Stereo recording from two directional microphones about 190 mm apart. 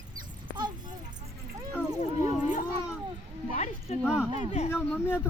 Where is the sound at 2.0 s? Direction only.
40° left (ahead or behind).